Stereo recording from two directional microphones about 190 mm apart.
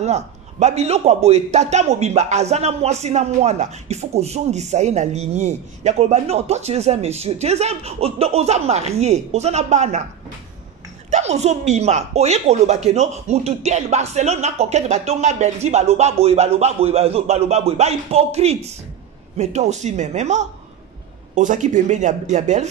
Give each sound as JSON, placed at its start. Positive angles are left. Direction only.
{"t": 0.0, "sound": "a man's voice", "side_deg": -35}
{"t": 11.1, "sound": "a man's voice", "side_deg": -35}